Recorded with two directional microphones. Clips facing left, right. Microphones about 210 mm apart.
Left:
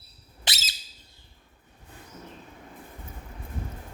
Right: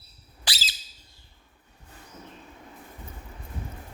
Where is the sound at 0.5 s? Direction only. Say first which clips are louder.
Left 1 dB; 20° left (ahead or behind).